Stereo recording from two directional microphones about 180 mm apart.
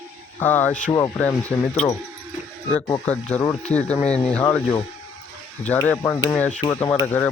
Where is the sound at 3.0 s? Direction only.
5° left (ahead or behind).